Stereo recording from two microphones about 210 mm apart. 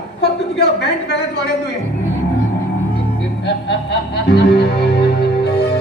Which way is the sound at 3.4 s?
55° left (ahead or behind).